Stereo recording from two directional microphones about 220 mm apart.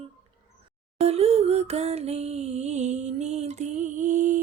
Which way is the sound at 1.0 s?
25° right (ahead or behind).